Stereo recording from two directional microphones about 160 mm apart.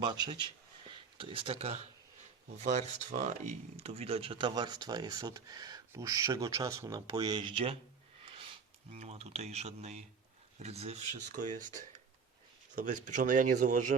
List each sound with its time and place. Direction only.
0.0 s speech: 25° right (ahead or behind)
8.2 s a sound: 35° right (ahead or behind)
9.0 s speech: 45° right (ahead or behind)
11.3 s speech: 55° right (ahead or behind)